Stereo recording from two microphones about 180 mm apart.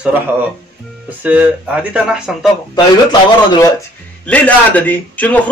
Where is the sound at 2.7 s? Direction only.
20° left (ahead or behind).